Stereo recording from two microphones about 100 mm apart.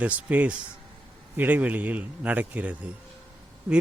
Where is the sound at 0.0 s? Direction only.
15° right (ahead or behind).